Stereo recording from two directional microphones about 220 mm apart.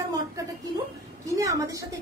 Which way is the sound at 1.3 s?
15° right (ahead or behind).